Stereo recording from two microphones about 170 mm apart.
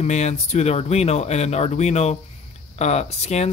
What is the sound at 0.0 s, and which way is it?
Speech, 40° left (ahead or behind).